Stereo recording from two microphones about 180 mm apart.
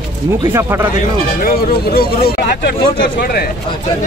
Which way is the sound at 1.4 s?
60° left (ahead or behind).